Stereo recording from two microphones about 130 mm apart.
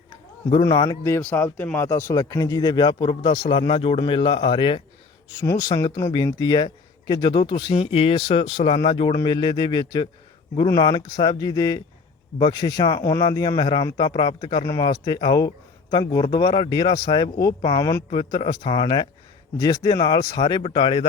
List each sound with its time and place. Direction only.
0.6 s speech: 30° left (ahead or behind)
1.2 s speech: 10° left (ahead or behind); by 3.7 s 35° left (ahead or behind)
3.7 s speech: 45° left (ahead or behind)
5.4 s a man's voice: 25° left (ahead or behind)
20.6 s speech: 45° left (ahead or behind)